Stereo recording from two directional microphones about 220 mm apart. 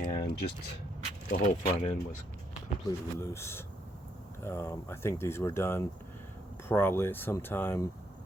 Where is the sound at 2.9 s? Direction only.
10° left (ahead or behind).